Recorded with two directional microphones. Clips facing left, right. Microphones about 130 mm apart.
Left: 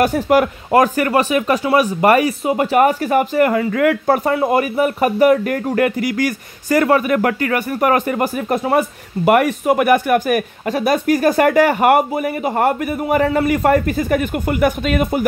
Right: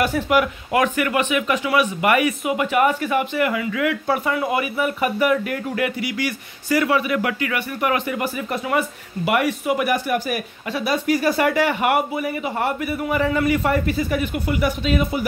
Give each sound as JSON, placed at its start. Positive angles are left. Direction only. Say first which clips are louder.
{"t": 0.0, "sound": "speech", "louder": "left 5 dB", "side_deg": 45}